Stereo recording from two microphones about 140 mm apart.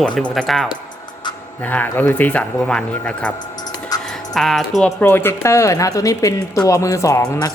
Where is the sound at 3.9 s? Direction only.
25° left (ahead or behind).